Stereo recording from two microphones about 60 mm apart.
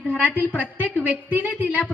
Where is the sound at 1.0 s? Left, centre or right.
Right.